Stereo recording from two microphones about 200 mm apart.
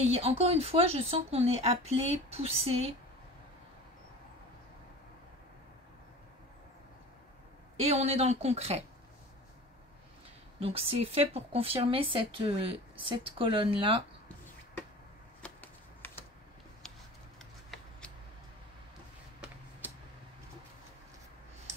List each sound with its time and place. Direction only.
0.0 s speech: 30° right (ahead or behind)
7.8 s speech: 30° right (ahead or behind)
10.6 s speech: 30° right (ahead or behind)
15.4 s shuffling cards: 10° left (ahead or behind)